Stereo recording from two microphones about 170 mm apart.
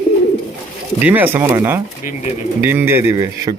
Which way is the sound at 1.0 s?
10° right (ahead or behind).